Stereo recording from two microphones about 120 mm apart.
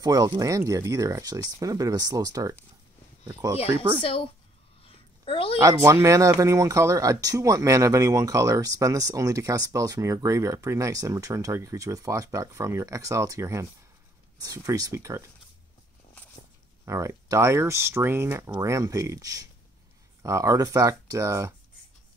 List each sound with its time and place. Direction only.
0.0 s speech: 30° right (ahead or behind)
4.0 s speech: 50° left (ahead or behind)
4.8 s a sound: 50° left (ahead or behind)
5.6 s speech: 25° right (ahead or behind)
16.8 s speech: 25° right (ahead or behind)